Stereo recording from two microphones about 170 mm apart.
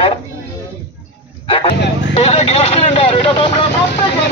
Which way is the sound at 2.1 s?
35° left (ahead or behind).